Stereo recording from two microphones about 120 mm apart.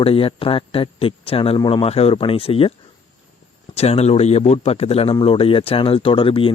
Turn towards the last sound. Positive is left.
turn(degrees=50)  # may be behind; listen again after turning